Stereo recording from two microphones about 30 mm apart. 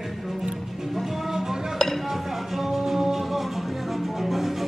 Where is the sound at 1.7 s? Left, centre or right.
Centre.